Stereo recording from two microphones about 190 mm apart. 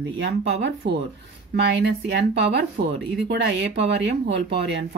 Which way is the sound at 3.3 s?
65° right (ahead or behind).